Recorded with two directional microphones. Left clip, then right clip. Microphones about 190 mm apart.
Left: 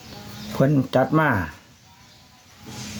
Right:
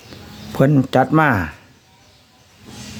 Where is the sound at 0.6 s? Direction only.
35° right (ahead or behind).